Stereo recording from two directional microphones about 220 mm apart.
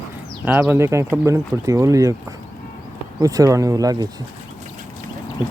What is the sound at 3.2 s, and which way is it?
Speech, 15° right (ahead or behind).